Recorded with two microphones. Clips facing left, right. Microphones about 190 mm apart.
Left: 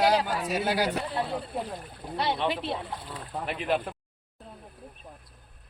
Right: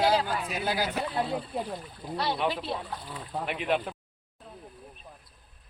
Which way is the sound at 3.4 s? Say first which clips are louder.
Left 1 dB; centre (ahead or behind).